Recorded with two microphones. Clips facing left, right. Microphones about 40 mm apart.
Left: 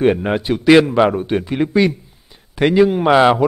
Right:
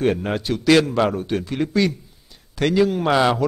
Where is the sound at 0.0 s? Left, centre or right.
Left.